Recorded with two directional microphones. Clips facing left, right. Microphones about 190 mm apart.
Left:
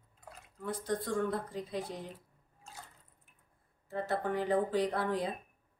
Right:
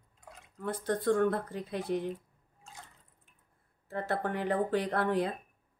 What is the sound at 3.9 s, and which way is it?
A woman's voice, 65° right (ahead or behind).